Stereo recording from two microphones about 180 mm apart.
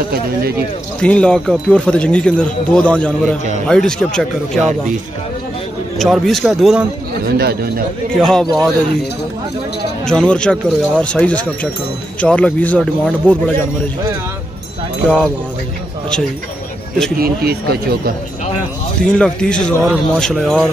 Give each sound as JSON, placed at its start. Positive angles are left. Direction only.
{"t": 1.0, "sound": "speech", "side_deg": 5}
{"t": 5.9, "sound": "speech", "side_deg": 0}
{"t": 7.2, "sound": "speech", "side_deg": -60}
{"t": 8.1, "sound": "speech", "side_deg": 5}
{"t": 10.0, "sound": "speech", "side_deg": 5}
{"t": 17.2, "sound": "speech", "side_deg": -60}
{"t": 19.0, "sound": "speech", "side_deg": 5}